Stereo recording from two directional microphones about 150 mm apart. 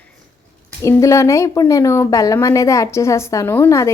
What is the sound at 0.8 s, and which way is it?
A woman's voice, 20° left (ahead or behind).